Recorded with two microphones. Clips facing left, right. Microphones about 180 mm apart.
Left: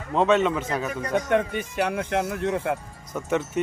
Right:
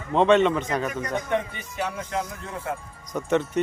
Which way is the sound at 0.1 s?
5° left (ahead or behind).